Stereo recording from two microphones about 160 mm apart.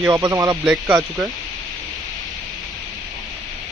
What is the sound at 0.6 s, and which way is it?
Speech, 5° right (ahead or behind).